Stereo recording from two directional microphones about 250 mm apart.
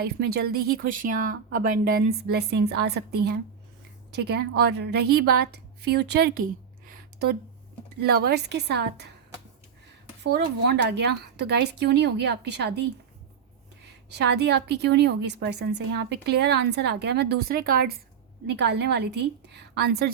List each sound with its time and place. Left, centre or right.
0.3 s a woman's voice: right
10.2 s speech: right
14.1 s a woman's voice: right